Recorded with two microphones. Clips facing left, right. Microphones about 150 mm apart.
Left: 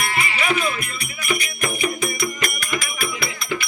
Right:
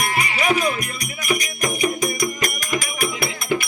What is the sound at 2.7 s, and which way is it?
Music, 40° right (ahead or behind).